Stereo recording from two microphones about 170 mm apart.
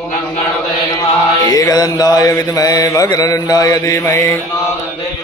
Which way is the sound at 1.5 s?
25° left (ahead or behind).